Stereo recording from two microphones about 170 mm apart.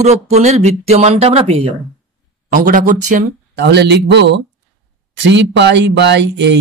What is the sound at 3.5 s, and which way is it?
Speech, 85° right.